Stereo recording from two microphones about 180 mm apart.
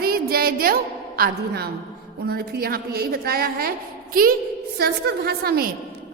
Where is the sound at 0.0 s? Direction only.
55° right (ahead or behind).